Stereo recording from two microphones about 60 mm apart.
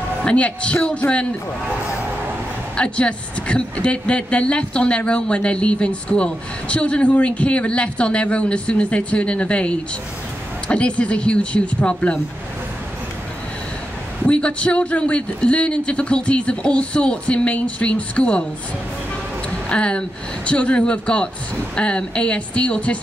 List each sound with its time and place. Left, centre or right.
0.2 s a man's voice: centre
2.7 s a woman's voice: centre
14.2 s a woman's voice: centre
19.7 s a woman's voice: centre